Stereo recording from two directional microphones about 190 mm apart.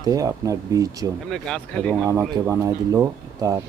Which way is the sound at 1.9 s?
10° right (ahead or behind).